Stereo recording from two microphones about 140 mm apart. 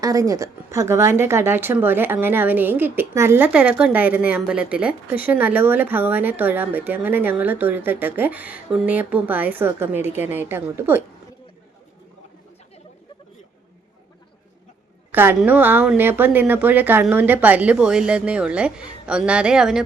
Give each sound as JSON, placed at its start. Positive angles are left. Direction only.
{"t": 0.0, "sound": "speech", "side_deg": -25}
{"t": 15.1, "sound": "a woman's voice", "side_deg": -15}